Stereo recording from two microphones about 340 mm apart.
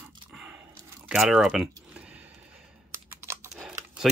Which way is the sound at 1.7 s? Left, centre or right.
Centre.